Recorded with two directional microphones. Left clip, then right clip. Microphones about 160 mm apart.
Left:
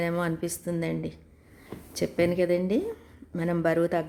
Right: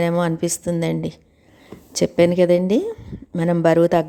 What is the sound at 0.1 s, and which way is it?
A woman's voice, 40° right (ahead or behind).